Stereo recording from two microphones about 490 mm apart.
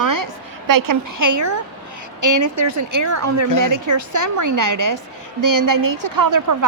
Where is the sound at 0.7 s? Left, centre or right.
Right.